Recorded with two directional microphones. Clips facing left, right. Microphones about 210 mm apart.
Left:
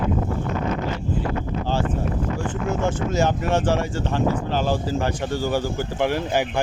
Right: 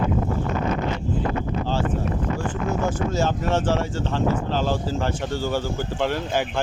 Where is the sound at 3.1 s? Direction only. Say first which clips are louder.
Left 3 dB; 15° left (ahead or behind).